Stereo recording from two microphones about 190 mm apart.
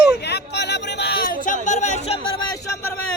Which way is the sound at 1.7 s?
40° left (ahead or behind).